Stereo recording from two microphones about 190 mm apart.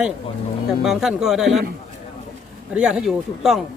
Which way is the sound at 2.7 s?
5° right (ahead or behind).